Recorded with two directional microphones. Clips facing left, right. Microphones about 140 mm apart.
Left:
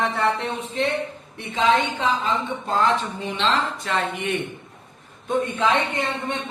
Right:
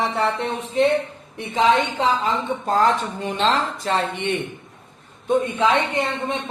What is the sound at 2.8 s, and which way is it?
A woman's voice, 45° right (ahead or behind).